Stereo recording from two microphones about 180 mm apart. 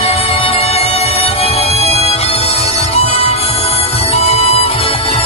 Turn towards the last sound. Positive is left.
turn(degrees=30)  # may be behind; listen again after turning